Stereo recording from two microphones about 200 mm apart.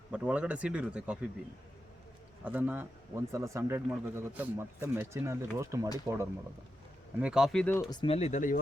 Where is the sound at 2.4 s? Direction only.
10° right (ahead or behind).